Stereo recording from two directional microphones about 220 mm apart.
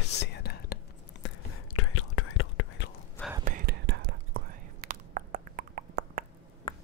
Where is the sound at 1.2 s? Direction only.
85° left; by 2.9 s 65° left (ahead or behind).